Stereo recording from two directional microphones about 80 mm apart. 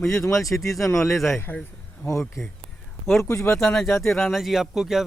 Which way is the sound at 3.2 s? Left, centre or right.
Left.